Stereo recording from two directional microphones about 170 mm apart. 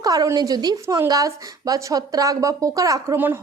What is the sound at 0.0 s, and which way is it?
A woman's voice, 20° right (ahead or behind).